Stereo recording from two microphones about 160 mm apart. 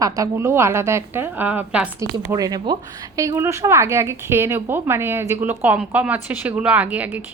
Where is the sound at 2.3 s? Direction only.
25° right (ahead or behind).